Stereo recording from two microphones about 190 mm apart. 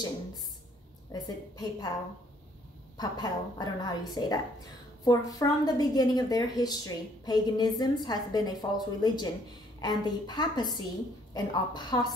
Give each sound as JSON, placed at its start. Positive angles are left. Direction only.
{"t": 1.1, "sound": "a woman's voice", "side_deg": 20}
{"t": 3.0, "sound": "a woman's voice", "side_deg": 20}